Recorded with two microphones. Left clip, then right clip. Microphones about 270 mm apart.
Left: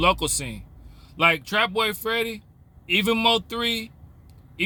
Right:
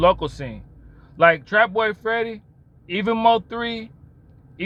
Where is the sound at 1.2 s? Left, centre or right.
Centre.